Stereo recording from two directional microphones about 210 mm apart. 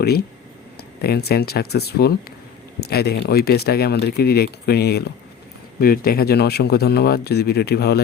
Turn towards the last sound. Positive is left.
turn(degrees=50)  # may be behind; listen again after turning